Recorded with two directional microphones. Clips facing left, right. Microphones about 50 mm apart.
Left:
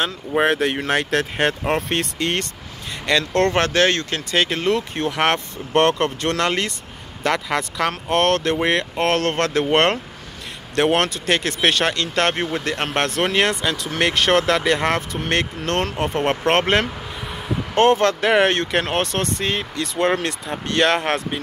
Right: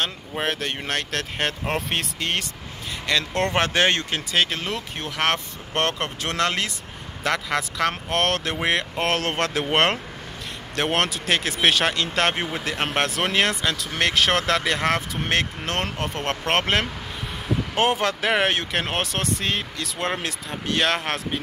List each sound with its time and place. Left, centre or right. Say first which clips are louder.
0.4 s speech: left 8 dB; centre
4.3 s speech: left 5 dB; centre
16.0 s speech: left 6 dB; centre